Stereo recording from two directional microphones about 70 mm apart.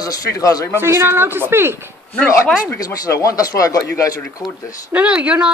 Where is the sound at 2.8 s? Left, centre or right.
Left.